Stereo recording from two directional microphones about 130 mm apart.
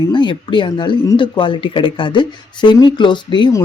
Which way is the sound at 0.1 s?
35° left (ahead or behind).